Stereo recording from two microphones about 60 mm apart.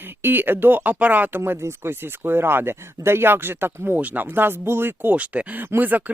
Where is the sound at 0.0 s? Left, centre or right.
Right.